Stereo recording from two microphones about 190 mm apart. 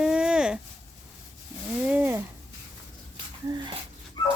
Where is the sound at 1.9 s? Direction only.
10° right (ahead or behind).